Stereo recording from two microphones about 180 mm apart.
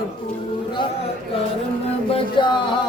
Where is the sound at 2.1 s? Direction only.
25° left (ahead or behind).